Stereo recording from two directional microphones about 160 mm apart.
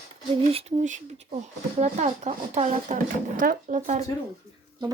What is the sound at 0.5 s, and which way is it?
Speech, 40° right (ahead or behind).